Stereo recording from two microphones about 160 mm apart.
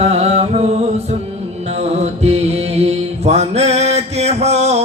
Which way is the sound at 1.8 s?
40° right (ahead or behind).